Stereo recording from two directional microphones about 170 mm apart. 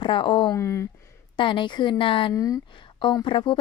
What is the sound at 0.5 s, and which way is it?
Speech, 15° left (ahead or behind).